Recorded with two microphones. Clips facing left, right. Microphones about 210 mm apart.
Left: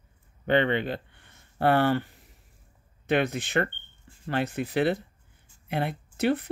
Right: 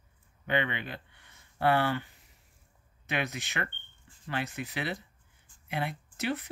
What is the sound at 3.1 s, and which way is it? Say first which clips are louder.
Speech: left 9 dB; 55° left (ahead or behind).